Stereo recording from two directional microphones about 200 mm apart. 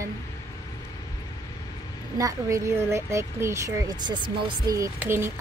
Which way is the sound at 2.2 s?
15° right (ahead or behind).